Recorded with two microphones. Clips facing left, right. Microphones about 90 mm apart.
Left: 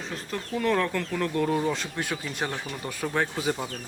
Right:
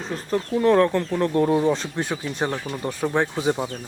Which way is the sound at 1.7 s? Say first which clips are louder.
Right 5 dB; 30° right (ahead or behind).